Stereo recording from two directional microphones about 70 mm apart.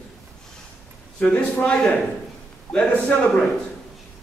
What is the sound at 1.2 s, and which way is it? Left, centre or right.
A man's voice, centre.